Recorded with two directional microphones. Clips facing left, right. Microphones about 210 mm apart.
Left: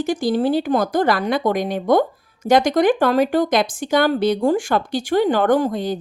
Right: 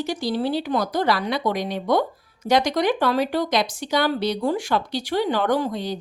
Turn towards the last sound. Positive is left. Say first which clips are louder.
# left 5 dB
turn(degrees=50)  # may be behind; listen again after turning